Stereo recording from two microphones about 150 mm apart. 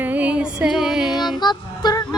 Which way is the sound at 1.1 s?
30° left (ahead or behind).